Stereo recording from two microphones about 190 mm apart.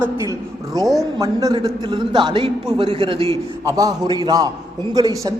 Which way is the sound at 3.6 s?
20° right (ahead or behind).